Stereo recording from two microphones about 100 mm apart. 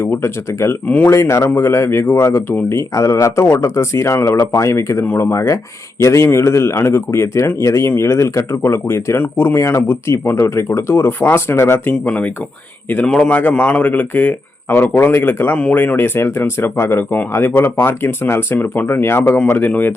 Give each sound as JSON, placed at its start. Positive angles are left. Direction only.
{"t": 0.0, "sound": "speech", "side_deg": 25}
{"t": 0.9, "sound": "speech", "side_deg": 15}
{"t": 1.1, "sound": "speech", "side_deg": 30}
{"t": 12.0, "sound": "speech", "side_deg": 15}